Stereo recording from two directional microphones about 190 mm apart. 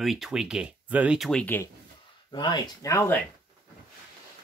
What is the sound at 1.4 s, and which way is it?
Speech, 10° left (ahead or behind).